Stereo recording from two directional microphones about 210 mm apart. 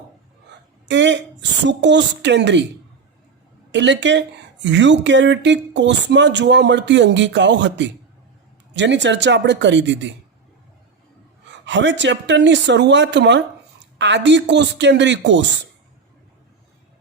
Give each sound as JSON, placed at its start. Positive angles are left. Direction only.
{"t": 0.9, "sound": "speech", "side_deg": -60}
{"t": 3.7, "sound": "speech", "side_deg": -60}
{"t": 11.6, "sound": "speech", "side_deg": -60}